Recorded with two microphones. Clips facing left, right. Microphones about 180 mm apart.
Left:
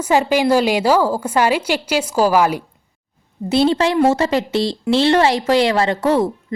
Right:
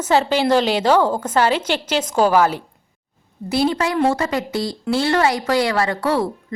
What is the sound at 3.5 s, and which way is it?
Speech, 25° left (ahead or behind).